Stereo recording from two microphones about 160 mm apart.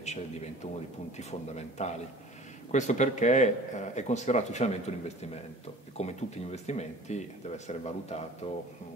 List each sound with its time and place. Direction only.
0.0 s a man's voice: 45° left (ahead or behind)